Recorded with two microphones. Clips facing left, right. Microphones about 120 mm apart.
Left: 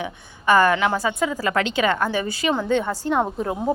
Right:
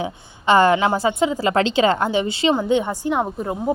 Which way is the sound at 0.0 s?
25° right (ahead or behind).